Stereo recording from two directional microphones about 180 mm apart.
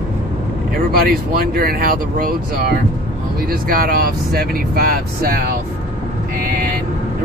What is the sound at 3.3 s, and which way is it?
Speech, 55° right (ahead or behind).